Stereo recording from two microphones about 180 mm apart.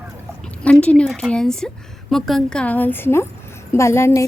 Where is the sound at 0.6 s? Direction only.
5° left (ahead or behind).